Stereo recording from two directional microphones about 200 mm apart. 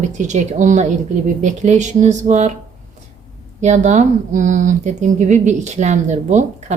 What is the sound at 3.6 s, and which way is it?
Speech, 35° right (ahead or behind).